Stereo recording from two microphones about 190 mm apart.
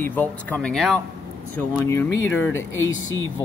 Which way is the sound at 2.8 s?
90° left.